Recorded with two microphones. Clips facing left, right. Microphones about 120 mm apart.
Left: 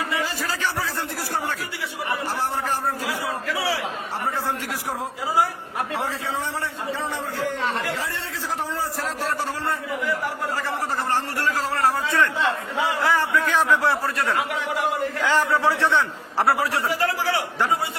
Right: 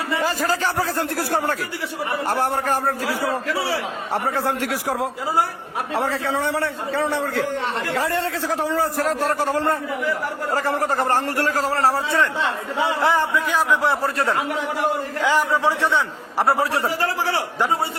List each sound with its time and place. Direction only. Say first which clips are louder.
0.2 s a man's voice: right 5 dB; 45° right (ahead or behind)
4.1 s a man's voice: right 6 dB; 65° right (ahead or behind)
7.9 s speech: right 7 dB; 55° right (ahead or behind)
8.4 s a man's voice: right 4 dB; 80° right
9.0 s a man's voice: right 6 dB; 50° right (ahead or behind); by 14.3 s 25° right (ahead or behind)
15.2 s a man's voice: right 2 dB; 15° right (ahead or behind)
16.6 s speech: right 2 dB; 30° right (ahead or behind)